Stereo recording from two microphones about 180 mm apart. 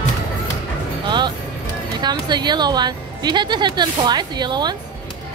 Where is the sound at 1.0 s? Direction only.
25° right (ahead or behind).